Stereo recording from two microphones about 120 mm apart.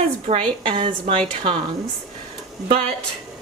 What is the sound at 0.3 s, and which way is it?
Speech, 45° right (ahead or behind).